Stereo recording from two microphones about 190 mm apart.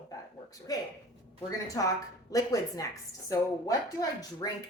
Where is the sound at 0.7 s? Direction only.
20° left (ahead or behind).